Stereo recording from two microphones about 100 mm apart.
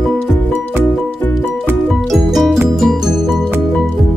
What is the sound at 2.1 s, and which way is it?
Music, centre (ahead or behind).